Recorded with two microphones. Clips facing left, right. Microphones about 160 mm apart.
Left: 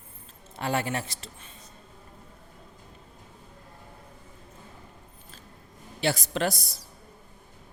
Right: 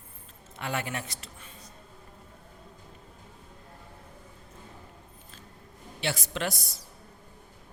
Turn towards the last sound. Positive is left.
turn(degrees=35)  # may be behind; listen again after turning